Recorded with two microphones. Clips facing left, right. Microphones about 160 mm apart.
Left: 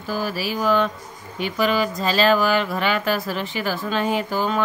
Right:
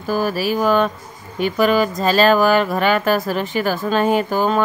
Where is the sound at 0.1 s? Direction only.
50° right (ahead or behind).